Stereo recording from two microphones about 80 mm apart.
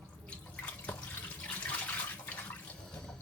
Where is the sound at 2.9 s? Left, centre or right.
Centre.